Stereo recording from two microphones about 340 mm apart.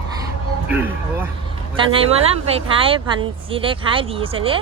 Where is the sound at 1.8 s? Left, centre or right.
Centre.